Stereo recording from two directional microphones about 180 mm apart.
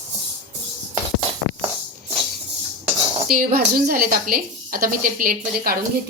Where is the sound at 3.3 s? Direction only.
55° right (ahead or behind).